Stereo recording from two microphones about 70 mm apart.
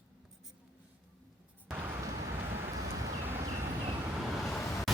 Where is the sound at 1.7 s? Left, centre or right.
Right.